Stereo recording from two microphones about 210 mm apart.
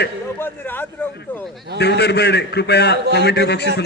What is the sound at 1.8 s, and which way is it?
A man's voice, 55° left (ahead or behind).